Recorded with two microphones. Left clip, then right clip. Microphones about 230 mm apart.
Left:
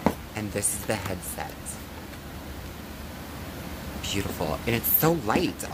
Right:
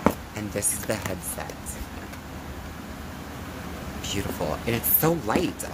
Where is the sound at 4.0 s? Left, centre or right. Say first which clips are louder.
Even; centre.